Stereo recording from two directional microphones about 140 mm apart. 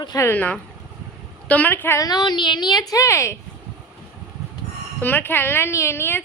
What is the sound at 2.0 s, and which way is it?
Speech, 30° left (ahead or behind).